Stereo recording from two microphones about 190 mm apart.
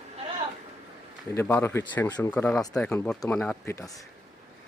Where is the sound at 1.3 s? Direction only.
10° left (ahead or behind).